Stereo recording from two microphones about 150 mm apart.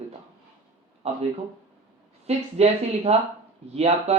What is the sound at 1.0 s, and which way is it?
Speech, 45° right (ahead or behind).